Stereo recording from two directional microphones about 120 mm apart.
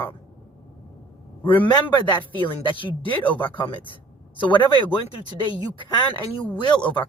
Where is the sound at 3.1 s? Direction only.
15° left (ahead or behind).